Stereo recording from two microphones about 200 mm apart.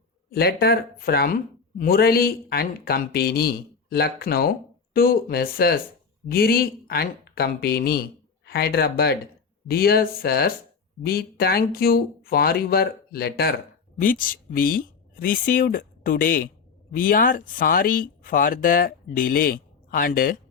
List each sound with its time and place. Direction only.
0.3 s speech: 50° left (ahead or behind)